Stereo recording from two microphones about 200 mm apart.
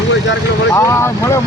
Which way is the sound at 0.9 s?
10° left (ahead or behind).